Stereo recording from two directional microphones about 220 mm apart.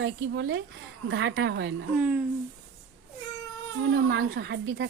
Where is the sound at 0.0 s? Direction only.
55° right (ahead or behind).